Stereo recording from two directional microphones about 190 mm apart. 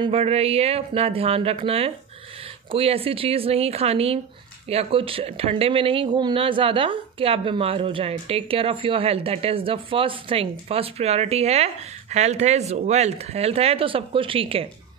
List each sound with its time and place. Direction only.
0.0 s speech: 30° right (ahead or behind)